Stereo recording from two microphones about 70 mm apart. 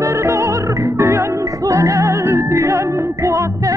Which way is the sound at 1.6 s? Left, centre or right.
Right.